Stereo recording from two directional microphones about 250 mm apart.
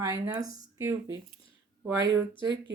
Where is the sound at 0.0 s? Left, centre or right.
Centre.